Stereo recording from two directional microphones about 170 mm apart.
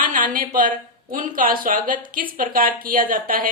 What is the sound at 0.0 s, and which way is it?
A woman's voice, 50° right (ahead or behind).